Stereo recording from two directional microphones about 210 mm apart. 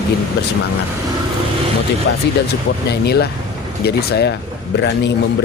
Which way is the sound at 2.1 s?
60° left (ahead or behind).